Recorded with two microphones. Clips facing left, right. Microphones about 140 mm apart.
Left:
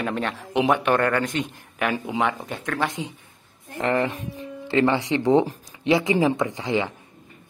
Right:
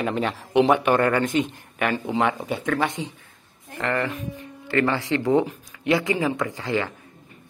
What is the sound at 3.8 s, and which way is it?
Speech, 20° left (ahead or behind).